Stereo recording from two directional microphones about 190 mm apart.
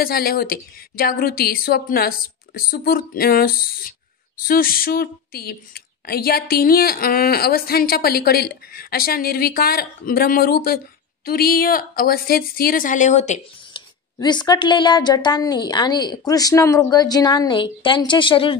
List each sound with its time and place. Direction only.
0.0 s a woman's voice: 50° left (ahead or behind)
14.1 s a woman's voice: 20° left (ahead or behind)